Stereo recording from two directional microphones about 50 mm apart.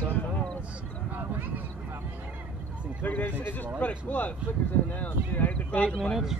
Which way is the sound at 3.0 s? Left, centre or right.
Left.